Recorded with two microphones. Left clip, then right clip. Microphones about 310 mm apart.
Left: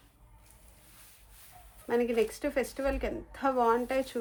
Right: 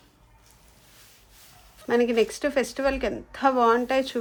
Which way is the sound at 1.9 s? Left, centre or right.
Right.